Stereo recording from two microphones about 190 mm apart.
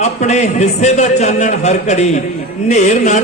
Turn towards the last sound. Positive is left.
turn(degrees=40)  # may be behind; listen again after turning